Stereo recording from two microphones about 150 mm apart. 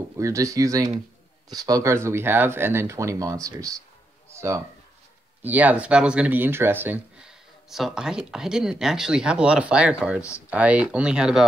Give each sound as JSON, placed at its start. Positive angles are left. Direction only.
{"t": 0.2, "sound": "speech", "side_deg": -20}